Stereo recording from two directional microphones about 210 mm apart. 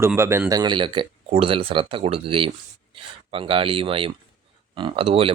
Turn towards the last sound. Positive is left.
turn(degrees=-25)  # may be behind; listen again after turning